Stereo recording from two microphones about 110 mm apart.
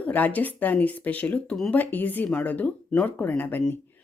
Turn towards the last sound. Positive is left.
turn(degrees=15)  # may be behind; listen again after turning